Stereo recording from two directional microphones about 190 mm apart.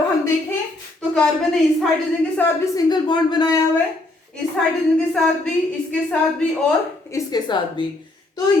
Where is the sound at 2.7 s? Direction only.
25° left (ahead or behind).